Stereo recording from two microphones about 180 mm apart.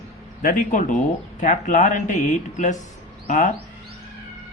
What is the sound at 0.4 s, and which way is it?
Speech, 45° left (ahead or behind).